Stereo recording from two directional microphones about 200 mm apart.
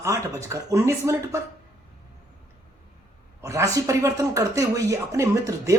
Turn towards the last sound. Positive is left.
turn(degrees=-15)  # may be behind; listen again after turning